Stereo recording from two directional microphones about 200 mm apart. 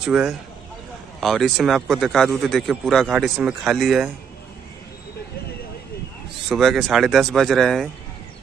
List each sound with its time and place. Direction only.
0.0 s speech: centre (ahead or behind)
6.5 s speech: centre (ahead or behind)